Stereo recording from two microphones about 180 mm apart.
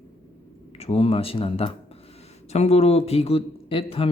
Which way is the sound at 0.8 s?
35° left (ahead or behind).